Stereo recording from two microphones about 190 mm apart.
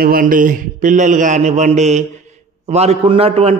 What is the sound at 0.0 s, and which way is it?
A man's voice, 50° right (ahead or behind).